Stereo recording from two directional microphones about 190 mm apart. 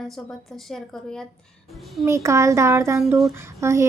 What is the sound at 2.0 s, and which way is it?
Speech, 15° right (ahead or behind).